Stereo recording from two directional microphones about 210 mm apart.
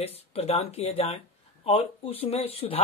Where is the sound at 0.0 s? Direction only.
30° left (ahead or behind).